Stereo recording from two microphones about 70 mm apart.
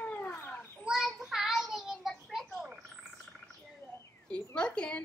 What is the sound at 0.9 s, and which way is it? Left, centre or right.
Child singing, centre.